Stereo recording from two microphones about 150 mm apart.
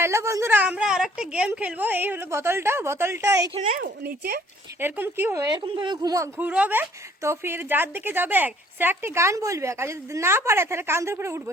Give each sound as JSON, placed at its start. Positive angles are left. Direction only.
{"t": 0.0, "sound": "a woman's voice", "side_deg": -20}
{"t": 3.6, "sound": "speech", "side_deg": -60}
{"t": 4.8, "sound": "a woman's voice", "side_deg": -15}
{"t": 5.6, "sound": "speech", "side_deg": -35}
{"t": 6.4, "sound": "a woman's voice", "side_deg": -10}